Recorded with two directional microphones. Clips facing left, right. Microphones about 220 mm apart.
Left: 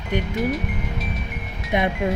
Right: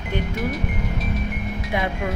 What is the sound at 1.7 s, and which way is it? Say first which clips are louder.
Speech: left 4 dB; 20° left (ahead or behind).